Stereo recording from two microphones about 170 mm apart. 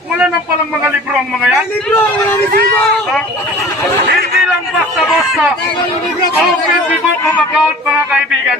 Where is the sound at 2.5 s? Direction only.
65° right (ahead or behind).